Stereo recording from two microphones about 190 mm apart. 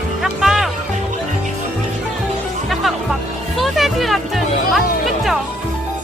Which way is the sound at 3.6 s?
Centre (ahead or behind).